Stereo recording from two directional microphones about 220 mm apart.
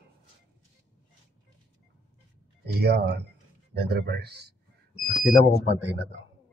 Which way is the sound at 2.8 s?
45° right (ahead or behind).